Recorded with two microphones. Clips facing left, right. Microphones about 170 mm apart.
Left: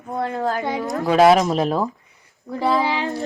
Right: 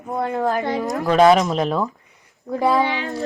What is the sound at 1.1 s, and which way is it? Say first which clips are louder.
Speech: even; 10° left (ahead or behind).